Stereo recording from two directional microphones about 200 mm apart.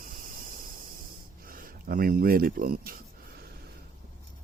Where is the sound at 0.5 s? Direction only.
45° right (ahead or behind).